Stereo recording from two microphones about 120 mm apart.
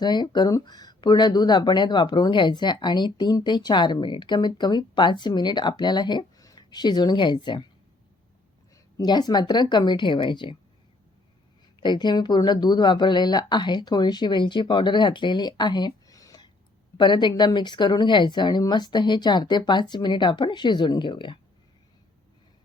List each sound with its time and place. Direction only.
0.0 s speech: 40° left (ahead or behind)
8.7 s speech: 35° left (ahead or behind)
11.8 s speech: 40° left (ahead or behind)